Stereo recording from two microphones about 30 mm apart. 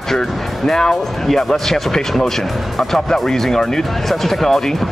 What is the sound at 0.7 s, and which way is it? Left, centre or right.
Speech, left.